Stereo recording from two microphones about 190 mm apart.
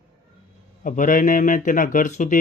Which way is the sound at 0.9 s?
45° left (ahead or behind).